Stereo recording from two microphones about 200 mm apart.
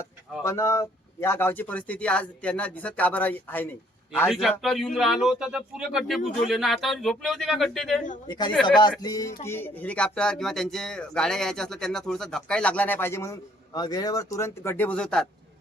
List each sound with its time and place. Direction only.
0.4 s speech: 15° left (ahead or behind)
8.3 s speech: 20° left (ahead or behind); by 15.3 s 5° left (ahead or behind)